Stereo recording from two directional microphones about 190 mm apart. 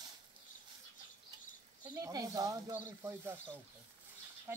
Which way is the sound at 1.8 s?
20° right (ahead or behind).